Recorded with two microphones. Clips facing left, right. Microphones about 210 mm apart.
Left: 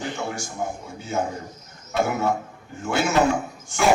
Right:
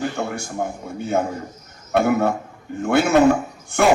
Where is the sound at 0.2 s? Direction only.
60° right (ahead or behind).